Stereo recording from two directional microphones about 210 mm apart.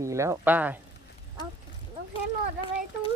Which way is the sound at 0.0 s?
15° right (ahead or behind).